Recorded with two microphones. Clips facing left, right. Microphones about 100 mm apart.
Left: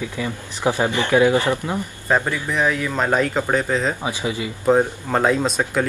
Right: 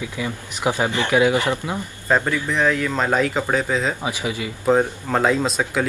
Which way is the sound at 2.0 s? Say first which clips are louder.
Right 1 dB; 10° left (ahead or behind).